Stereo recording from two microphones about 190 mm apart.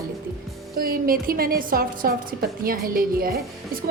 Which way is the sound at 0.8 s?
50° right (ahead or behind).